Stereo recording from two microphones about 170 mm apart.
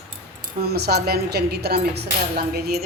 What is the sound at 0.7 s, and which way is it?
A woman's voice, 70° right (ahead or behind).